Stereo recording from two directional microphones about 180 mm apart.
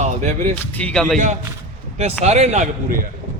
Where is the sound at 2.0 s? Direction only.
40° right (ahead or behind).